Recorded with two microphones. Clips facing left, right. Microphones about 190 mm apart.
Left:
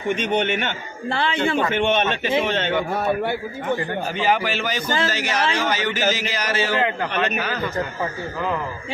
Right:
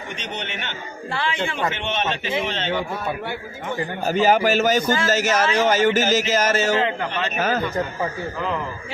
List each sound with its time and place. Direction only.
0.2 s a man's voice: 50° left (ahead or behind)
1.1 s a man's voice: 35° left (ahead or behind)
1.5 s a man's voice: 50° left (ahead or behind)
4.0 s a man's voice: 45° right (ahead or behind)